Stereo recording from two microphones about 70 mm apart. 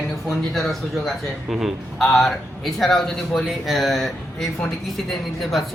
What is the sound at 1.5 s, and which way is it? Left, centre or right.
A man's voice, centre.